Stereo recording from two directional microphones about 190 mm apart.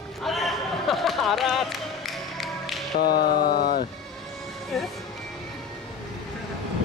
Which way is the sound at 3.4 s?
50° left (ahead or behind).